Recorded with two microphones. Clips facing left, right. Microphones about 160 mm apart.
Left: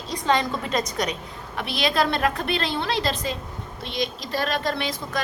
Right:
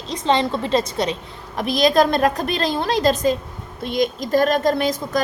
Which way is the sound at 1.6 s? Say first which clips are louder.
Right 7 dB; 40° right (ahead or behind).